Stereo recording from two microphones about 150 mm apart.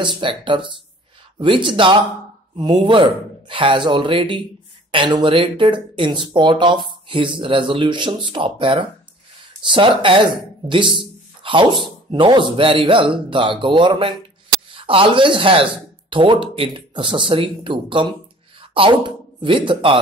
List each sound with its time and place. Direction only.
0.0 s speech: 35° right (ahead or behind)